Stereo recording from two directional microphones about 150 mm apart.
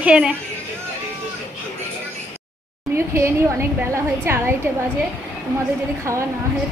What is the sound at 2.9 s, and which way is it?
A woman's voice, 15° right (ahead or behind).